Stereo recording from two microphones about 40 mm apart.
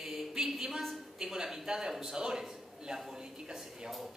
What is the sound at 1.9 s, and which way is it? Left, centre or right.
Speech, centre.